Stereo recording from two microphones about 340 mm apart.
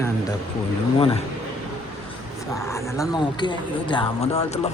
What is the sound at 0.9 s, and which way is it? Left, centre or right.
Speech, centre.